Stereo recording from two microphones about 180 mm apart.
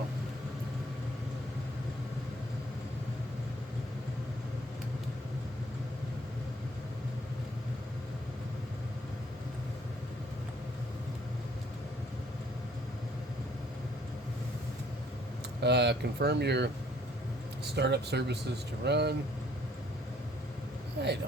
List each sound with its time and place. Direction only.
15.6 s speech: 70° right (ahead or behind)
17.7 s speech: 70° right (ahead or behind)
21.0 s speech: 65° right (ahead or behind)